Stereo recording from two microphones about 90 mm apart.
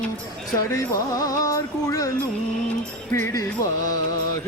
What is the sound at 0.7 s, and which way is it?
Music, 40° left (ahead or behind).